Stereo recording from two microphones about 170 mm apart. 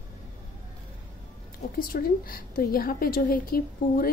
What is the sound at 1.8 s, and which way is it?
A woman's voice, 55° left (ahead or behind).